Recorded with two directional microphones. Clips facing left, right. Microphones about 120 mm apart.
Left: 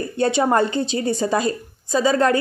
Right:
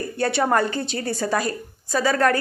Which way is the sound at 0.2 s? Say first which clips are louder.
Left 3 dB; 20° left (ahead or behind).